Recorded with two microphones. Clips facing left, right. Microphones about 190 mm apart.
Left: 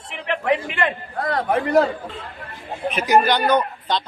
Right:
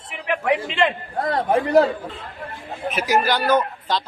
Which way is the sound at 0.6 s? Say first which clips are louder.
Right 2 dB; 25° right (ahead or behind).